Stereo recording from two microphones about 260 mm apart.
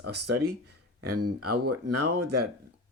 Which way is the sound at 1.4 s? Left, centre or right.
Right.